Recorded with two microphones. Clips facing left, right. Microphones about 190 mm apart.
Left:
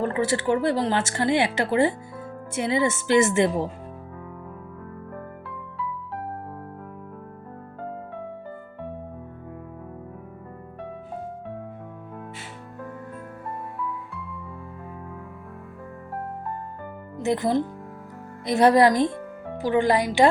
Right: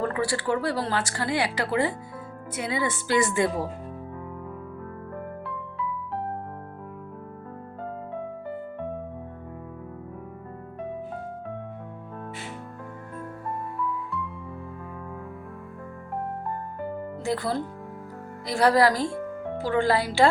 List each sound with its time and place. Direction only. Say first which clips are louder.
0.0 s speech: left 3 dB; 25° left (ahead or behind)
17.2 s speech: left 5 dB; 20° left (ahead or behind)